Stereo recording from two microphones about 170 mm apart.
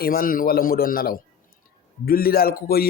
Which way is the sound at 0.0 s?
60° left (ahead or behind).